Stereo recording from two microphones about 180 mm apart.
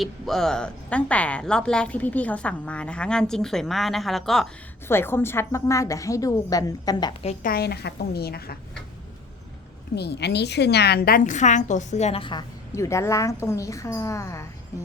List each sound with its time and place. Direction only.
0.0 s a woman's voice: centre (ahead or behind)
4.9 s a woman's voice: 15° left (ahead or behind)
7.4 s a woman's voice: 60° left (ahead or behind)
9.9 s a woman's voice: 65° left (ahead or behind); by 14.4 s 15° left (ahead or behind)